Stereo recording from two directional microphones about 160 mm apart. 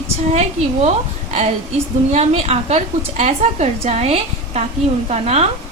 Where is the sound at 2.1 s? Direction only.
40° right (ahead or behind).